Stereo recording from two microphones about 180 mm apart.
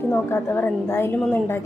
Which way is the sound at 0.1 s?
10° left (ahead or behind).